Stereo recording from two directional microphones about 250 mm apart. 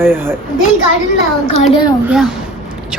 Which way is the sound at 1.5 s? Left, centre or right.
Left.